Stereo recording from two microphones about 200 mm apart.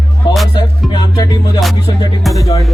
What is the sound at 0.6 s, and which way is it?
Music, 20° left (ahead or behind).